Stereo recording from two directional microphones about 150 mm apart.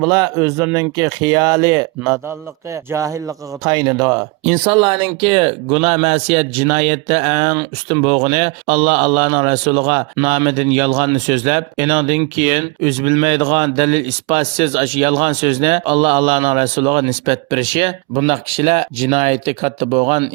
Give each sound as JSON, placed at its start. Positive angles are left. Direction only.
{"t": 0.0, "sound": "speech", "side_deg": -25}
{"t": 4.4, "sound": "speech", "side_deg": -35}
{"t": 7.4, "sound": "speech", "side_deg": -25}
{"t": 8.0, "sound": "speech", "side_deg": -40}